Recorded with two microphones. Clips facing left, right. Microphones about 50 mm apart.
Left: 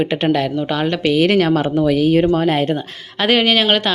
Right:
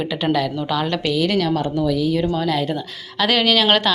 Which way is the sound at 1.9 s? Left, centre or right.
Left.